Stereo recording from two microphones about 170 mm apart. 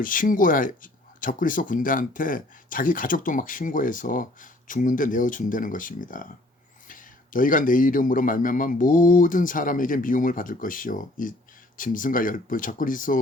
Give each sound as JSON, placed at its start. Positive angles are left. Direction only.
{"t": 0.0, "sound": "speech", "side_deg": 55}